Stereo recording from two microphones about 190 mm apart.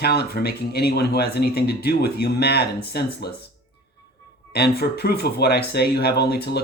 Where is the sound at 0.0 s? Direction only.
55° left (ahead or behind).